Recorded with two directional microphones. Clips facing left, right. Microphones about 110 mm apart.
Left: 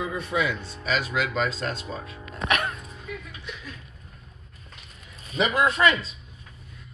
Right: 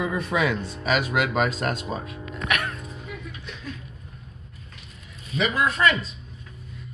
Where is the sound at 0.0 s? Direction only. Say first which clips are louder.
Right 3 dB; 65° right (ahead or behind).